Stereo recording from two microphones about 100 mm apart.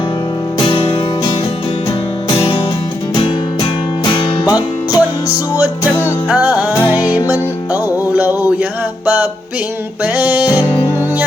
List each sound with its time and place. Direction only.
0.6 s music: 55° left (ahead or behind)
2.3 s music: 45° left (ahead or behind)
3.2 s music: 55° left (ahead or behind); by 5.0 s 40° left (ahead or behind)
6.2 s music: 15° right (ahead or behind)
6.9 s music: 40° left (ahead or behind)
7.9 s music: 20° right (ahead or behind)